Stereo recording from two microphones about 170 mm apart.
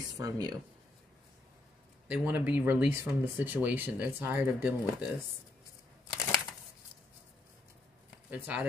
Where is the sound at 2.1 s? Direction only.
10° right (ahead or behind).